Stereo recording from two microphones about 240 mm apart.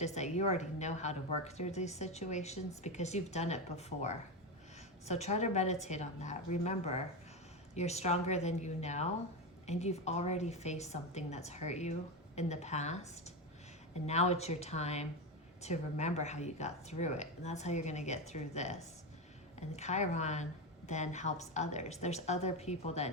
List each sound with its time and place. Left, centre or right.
0.0 s a woman's voice: left